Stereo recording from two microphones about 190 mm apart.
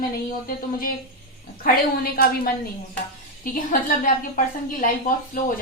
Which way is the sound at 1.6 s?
50° left (ahead or behind).